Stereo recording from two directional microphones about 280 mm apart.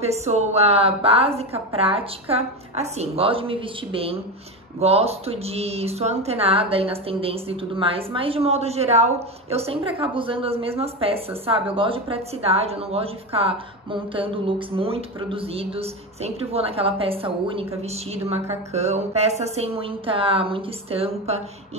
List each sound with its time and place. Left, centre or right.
0.0 s a woman's voice: right